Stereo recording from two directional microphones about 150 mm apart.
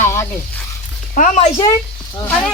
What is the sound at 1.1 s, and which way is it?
Speech, 60° left (ahead or behind).